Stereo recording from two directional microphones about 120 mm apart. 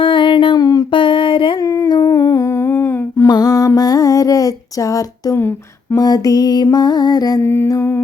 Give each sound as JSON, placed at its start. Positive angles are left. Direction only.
{"t": 0.0, "sound": "music", "side_deg": 45}
{"t": 1.6, "sound": "humming", "side_deg": 30}
{"t": 3.2, "sound": "music", "side_deg": 35}
{"t": 3.8, "sound": "a sound", "side_deg": 30}
{"t": 6.0, "sound": "music", "side_deg": 30}